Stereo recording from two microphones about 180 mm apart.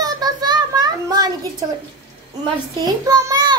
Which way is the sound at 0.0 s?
20° right (ahead or behind).